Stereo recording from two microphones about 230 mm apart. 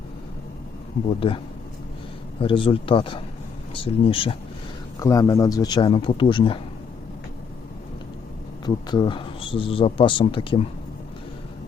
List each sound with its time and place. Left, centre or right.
2.4 s speech: left
8.6 s speech: centre